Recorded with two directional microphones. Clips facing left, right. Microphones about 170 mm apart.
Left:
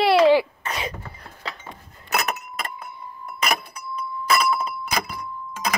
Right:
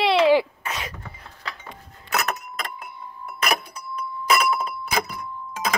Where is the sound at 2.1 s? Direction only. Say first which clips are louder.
Even; 15° left (ahead or behind).